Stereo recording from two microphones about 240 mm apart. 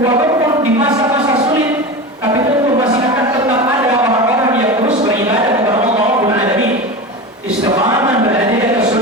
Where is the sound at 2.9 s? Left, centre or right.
Centre.